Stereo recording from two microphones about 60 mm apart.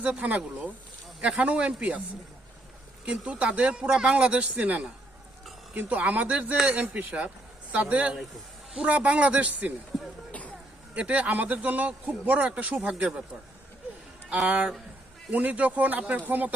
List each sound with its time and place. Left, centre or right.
0.2 s speech: right
3.1 s speech: centre
10.9 s speech: right
14.4 s speech: right